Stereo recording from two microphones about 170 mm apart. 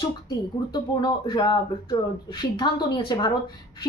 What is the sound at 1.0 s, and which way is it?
Speech, 25° left (ahead or behind).